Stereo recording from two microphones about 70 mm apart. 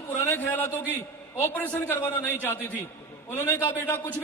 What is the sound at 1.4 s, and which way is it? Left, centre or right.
Speech, left.